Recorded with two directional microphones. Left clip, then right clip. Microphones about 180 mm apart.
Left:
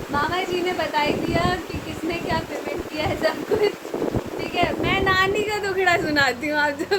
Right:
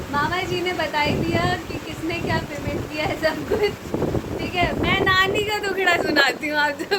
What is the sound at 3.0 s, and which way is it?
Speech, 15° right (ahead or behind).